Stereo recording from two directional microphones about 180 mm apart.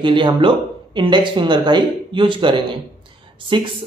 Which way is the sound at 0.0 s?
25° right (ahead or behind).